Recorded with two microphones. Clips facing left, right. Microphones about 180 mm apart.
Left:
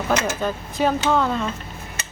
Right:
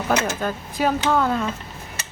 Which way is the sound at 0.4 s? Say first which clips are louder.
Left 1 dB; 5° right (ahead or behind).